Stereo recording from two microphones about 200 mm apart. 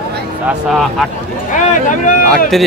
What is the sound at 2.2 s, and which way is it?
Speech, 5° left (ahead or behind).